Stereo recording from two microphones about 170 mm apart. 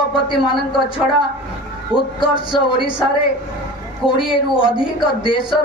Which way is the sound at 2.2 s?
30° left (ahead or behind).